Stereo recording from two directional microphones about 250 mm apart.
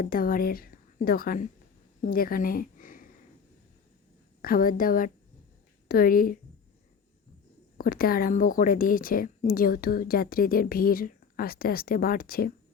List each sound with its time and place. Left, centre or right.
0.0 s a woman's voice: left
4.4 s speech: left
7.8 s speech: left